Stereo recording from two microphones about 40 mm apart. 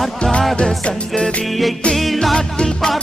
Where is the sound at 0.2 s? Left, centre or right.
Left.